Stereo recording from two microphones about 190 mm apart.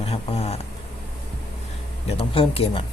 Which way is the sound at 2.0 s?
30° left (ahead or behind).